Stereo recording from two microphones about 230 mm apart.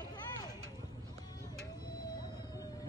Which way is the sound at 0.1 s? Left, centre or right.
Centre.